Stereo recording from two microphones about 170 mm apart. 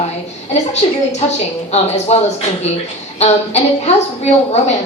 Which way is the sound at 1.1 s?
40° left (ahead or behind).